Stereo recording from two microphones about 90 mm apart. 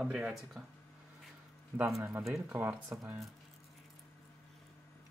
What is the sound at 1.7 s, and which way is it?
Speech, 10° right (ahead or behind).